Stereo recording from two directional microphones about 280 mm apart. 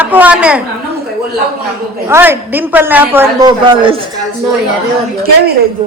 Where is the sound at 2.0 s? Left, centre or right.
Centre.